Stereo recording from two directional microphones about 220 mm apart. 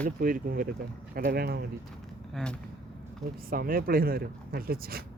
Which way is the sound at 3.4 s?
40° right (ahead or behind).